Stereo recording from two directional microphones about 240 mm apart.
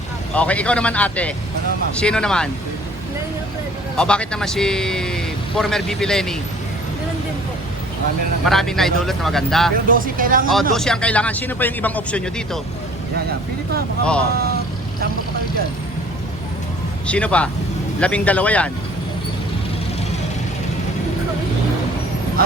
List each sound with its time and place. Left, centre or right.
0.3 s speech: centre
3.9 s speech: centre
8.4 s speech: centre
9.7 s speech: right
10.5 s speech: centre
14.0 s speech: centre
17.1 s speech: centre